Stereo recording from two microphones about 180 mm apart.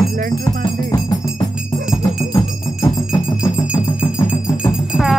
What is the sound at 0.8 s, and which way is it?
Music, 15° left (ahead or behind).